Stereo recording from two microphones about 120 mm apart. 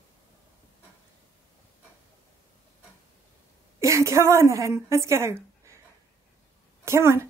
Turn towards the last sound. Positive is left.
turn(degrees=-20)  # may be behind; listen again after turning